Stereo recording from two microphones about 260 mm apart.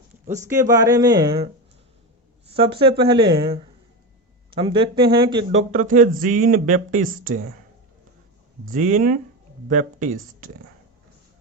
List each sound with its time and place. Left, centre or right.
0.4 s speech: centre
2.5 s speech: right
8.7 s speech: right